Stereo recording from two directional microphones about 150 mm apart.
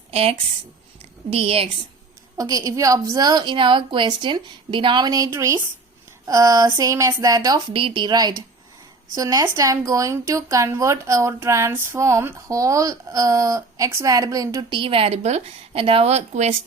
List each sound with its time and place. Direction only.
0.1 s speech: 40° right (ahead or behind)
2.4 s speech: 25° right (ahead or behind)
7.7 s speech: 35° right (ahead or behind)